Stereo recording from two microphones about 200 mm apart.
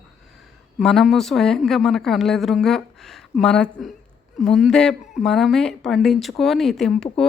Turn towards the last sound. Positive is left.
turn(degrees=5)  # may be behind; listen again after turning